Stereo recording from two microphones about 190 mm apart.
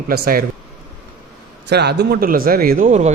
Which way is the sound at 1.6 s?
60° right (ahead or behind).